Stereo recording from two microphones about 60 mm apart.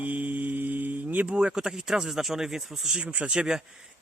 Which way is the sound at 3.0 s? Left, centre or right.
Right.